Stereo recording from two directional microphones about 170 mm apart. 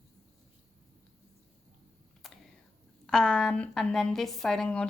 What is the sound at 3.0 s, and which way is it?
A woman's voice, 5° left (ahead or behind).